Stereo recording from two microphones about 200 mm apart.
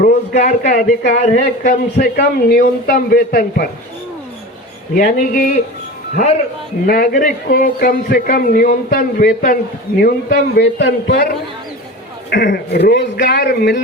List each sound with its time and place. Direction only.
0.0 s a man's voice: 40° left (ahead or behind)
4.9 s a man's voice: 45° left (ahead or behind)
6.8 s a man's voice: 50° left (ahead or behind)
12.3 s a man's voice: 55° left (ahead or behind)